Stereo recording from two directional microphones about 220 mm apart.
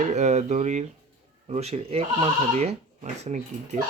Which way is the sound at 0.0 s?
30° right (ahead or behind).